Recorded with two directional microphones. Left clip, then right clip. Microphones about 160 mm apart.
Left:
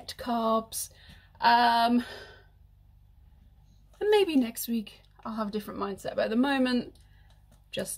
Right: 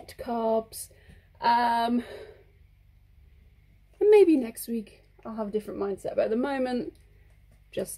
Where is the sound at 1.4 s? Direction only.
60° left (ahead or behind).